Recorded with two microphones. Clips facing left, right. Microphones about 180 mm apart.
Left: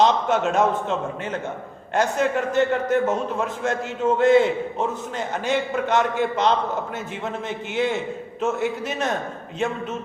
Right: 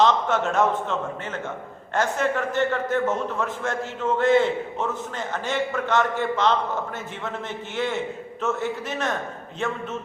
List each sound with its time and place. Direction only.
0.0 s a man's voice: 15° left (ahead or behind)
7.8 s a man's voice: 15° left (ahead or behind)